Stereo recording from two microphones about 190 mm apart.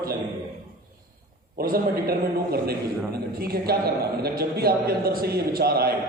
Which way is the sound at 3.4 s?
55° right (ahead or behind).